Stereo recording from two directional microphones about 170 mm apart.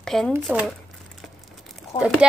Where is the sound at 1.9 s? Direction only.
30° left (ahead or behind).